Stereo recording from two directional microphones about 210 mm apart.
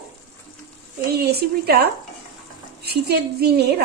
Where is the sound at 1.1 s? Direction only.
50° right (ahead or behind).